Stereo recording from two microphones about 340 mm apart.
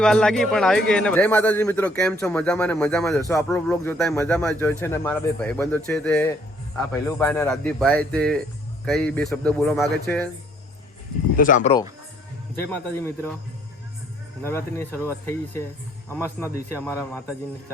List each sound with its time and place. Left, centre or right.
0.0 s a man's voice: centre
11.3 s speech: left
12.5 s speech: centre
14.4 s a man's voice: centre